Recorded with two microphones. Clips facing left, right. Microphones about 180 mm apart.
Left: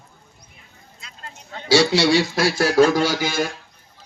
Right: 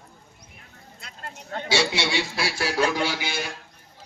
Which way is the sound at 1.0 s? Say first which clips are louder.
Right 1 dB; 60° right (ahead or behind).